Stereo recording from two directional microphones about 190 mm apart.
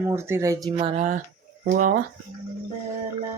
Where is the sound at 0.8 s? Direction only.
40° right (ahead or behind).